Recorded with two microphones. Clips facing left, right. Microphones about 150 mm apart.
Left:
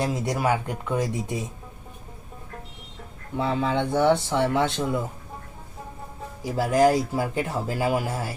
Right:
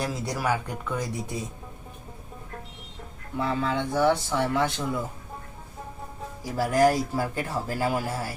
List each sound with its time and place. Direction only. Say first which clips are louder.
0.0 s speech: left 4 dB; 20° left (ahead or behind)
3.3 s speech: left 3 dB; 20° left (ahead or behind)
6.4 s speech: left 2 dB; 20° left (ahead or behind)